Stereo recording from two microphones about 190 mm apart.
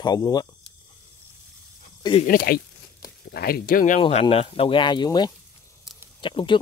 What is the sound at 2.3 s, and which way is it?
Speech, 50° left (ahead or behind).